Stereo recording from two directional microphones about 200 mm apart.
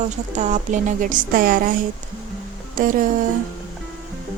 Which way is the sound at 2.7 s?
45° right (ahead or behind).